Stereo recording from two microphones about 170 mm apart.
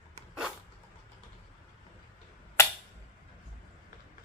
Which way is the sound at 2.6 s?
15° left (ahead or behind).